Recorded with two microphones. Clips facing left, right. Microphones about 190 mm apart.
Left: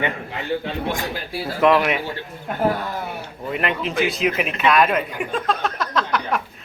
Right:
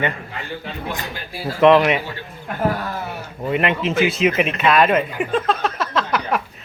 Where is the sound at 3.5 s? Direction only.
Centre (ahead or behind).